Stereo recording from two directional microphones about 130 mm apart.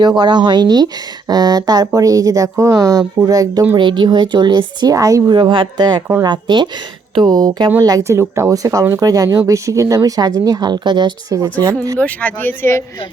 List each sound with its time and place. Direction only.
0.0 s speech: 35° right (ahead or behind)
5.4 s speech: 35° right (ahead or behind)
11.9 s speech: 10° left (ahead or behind)